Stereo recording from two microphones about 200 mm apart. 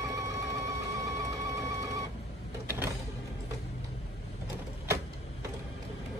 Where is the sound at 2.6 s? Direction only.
10° right (ahead or behind).